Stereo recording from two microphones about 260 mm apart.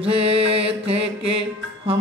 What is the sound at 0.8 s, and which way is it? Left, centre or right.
Mantra, right.